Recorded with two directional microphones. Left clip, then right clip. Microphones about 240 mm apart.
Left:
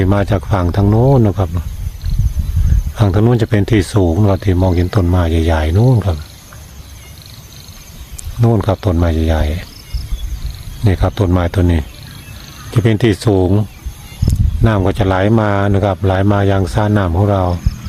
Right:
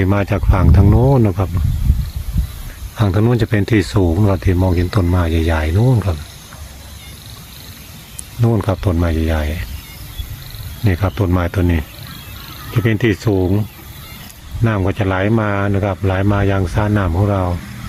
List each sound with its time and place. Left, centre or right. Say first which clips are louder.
0.0 s speech: left 2 dB; centre
2.9 s speech: left 2 dB; centre
8.4 s speech: left 3 dB; centre
10.8 s speech: left 3 dB; centre